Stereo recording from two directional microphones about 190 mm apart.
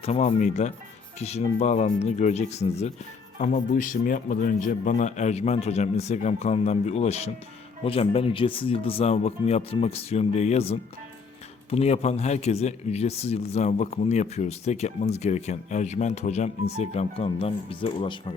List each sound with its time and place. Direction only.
0.0 s speech: 35° left (ahead or behind)